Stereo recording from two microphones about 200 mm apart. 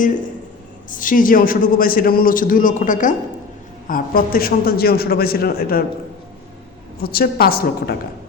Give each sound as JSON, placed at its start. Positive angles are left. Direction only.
{"t": 0.9, "sound": "a man's voice", "side_deg": 40}
{"t": 7.0, "sound": "a man's voice", "side_deg": 50}